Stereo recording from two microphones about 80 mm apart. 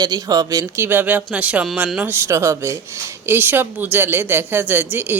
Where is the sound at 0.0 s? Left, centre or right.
Right.